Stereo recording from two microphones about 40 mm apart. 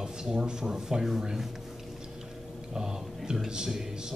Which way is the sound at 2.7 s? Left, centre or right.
Centre.